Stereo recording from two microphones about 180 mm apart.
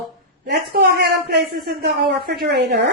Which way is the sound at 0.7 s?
65° right (ahead or behind).